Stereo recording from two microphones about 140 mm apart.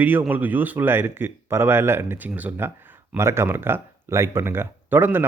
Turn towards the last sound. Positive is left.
turn(degrees=-15)  # may be behind; listen again after turning